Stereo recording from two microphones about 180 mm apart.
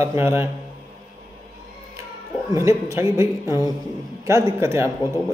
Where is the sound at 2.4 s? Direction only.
15° right (ahead or behind).